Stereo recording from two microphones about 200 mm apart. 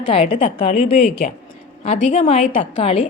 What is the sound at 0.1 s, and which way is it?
A woman's voice, 35° left (ahead or behind).